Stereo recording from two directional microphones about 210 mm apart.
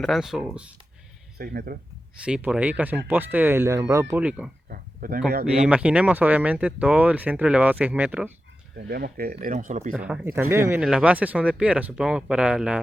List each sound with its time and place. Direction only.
0.0 s speech: centre (ahead or behind)
1.4 s speech: 45° right (ahead or behind)
2.2 s speech: 5° right (ahead or behind)
4.7 s speech: 45° right (ahead or behind)
5.6 s speech: 5° right (ahead or behind)
8.7 s speech: 50° right (ahead or behind)
9.9 s speech: 5° right (ahead or behind)